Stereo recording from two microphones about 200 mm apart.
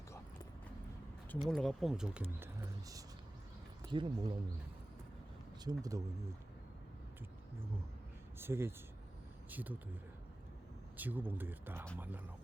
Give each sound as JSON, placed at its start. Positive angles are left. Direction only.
{"t": 1.4, "sound": "speech", "side_deg": 0}
{"t": 2.4, "sound": "a sound", "side_deg": -10}
{"t": 3.9, "sound": "speech", "side_deg": -25}
{"t": 5.6, "sound": "speech", "side_deg": -20}
{"t": 8.4, "sound": "speech", "side_deg": -10}
{"t": 10.9, "sound": "speech", "side_deg": -10}